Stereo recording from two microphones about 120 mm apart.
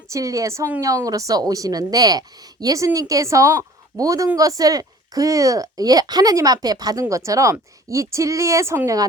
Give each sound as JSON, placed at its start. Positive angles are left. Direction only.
{"t": 0.1, "sound": "a woman's voice", "side_deg": -30}